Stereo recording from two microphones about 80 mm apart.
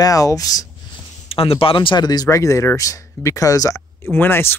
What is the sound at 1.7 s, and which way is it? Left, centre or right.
Speech, left.